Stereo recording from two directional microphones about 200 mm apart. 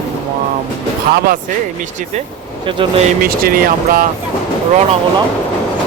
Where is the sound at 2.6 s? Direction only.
25° right (ahead or behind).